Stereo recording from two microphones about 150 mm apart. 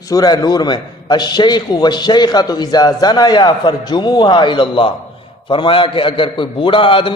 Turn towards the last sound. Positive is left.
turn(degrees=35)  # may be behind; listen again after turning